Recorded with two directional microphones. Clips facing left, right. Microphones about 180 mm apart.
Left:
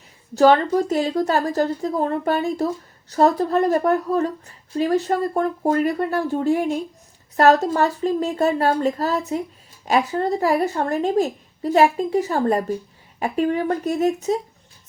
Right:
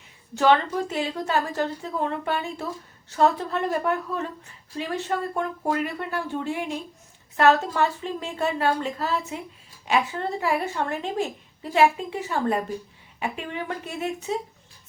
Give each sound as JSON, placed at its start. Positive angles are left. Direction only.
{"t": 0.3, "sound": "a woman's voice", "side_deg": 40}